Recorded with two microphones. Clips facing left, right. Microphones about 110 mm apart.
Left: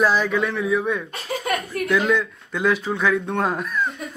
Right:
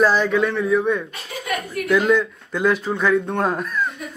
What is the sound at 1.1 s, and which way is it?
Chuckle, 30° left (ahead or behind).